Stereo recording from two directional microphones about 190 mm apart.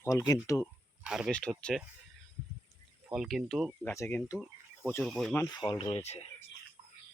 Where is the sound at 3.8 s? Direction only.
10° left (ahead or behind).